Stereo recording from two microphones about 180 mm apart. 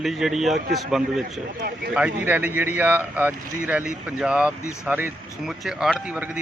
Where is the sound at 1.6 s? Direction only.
55° right (ahead or behind).